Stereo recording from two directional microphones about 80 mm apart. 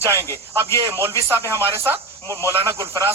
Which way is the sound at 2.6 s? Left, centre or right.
Right.